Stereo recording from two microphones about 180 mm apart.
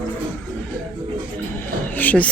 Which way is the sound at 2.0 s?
10° left (ahead or behind).